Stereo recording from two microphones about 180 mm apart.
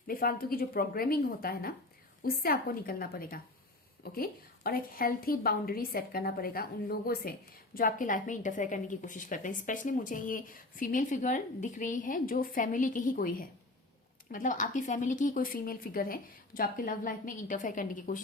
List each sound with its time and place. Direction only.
0.1 s a woman's voice: 55° left (ahead or behind)
14.3 s a woman's voice: 45° left (ahead or behind)